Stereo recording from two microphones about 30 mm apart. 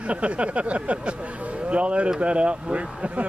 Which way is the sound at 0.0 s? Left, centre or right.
Right.